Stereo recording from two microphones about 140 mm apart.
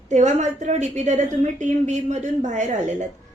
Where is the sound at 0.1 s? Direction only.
55° right (ahead or behind).